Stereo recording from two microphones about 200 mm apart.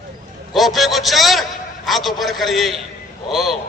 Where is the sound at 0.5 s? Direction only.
Centre (ahead or behind).